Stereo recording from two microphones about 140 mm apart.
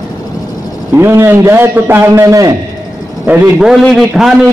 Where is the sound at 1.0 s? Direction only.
15° right (ahead or behind).